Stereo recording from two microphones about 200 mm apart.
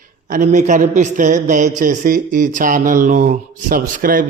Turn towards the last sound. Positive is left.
turn(degrees=-45)  # may be behind; listen again after turning